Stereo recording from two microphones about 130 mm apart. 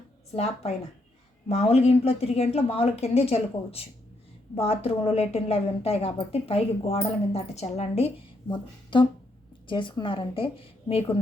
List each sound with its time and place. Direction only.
1.5 s a woman's voice: 50° left (ahead or behind)
8.4 s a woman's voice: 35° left (ahead or behind)